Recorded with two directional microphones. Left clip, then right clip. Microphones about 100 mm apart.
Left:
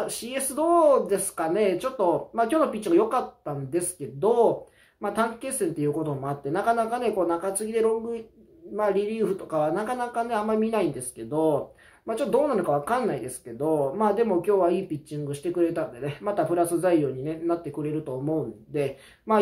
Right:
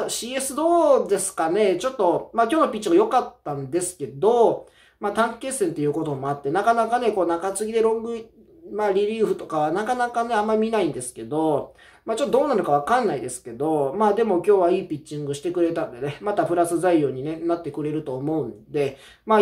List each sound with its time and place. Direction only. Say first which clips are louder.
0.0 s speech: right 3 dB; 15° right (ahead or behind)